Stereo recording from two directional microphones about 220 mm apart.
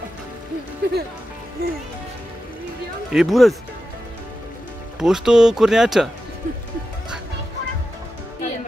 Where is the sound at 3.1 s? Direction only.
Centre (ahead or behind).